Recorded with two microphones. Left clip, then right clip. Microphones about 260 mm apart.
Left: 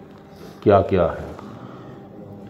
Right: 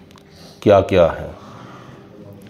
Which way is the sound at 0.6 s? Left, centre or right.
Right.